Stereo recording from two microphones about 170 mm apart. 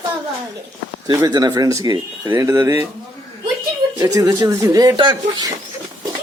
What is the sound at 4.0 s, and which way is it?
Speech, 25° right (ahead or behind).